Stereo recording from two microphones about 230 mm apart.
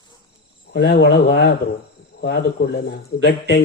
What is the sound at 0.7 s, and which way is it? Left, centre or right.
Speech, left.